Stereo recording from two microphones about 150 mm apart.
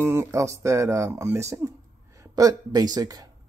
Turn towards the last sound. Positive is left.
turn(degrees=-25)  # may be behind; listen again after turning